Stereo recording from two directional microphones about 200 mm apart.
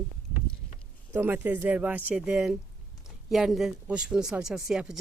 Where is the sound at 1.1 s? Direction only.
10° right (ahead or behind).